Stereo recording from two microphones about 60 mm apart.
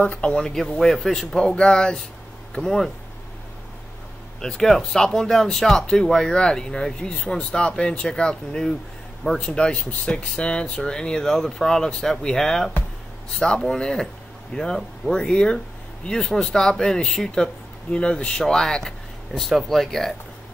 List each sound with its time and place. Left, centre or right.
0.0 s speech: left
4.4 s speech: centre